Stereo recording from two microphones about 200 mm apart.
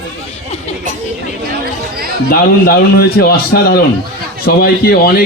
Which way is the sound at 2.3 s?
50° left (ahead or behind).